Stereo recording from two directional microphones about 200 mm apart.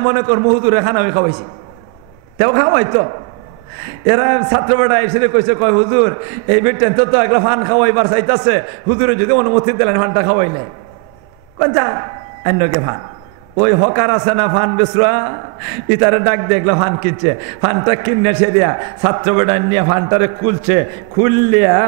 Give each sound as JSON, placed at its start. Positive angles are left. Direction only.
{"t": 0.0, "sound": "a man's voice", "side_deg": -15}
{"t": 11.6, "sound": "a man's voice", "side_deg": -20}